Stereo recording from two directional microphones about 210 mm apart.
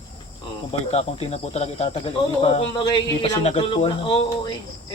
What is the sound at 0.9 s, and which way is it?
Speech, 30° left (ahead or behind).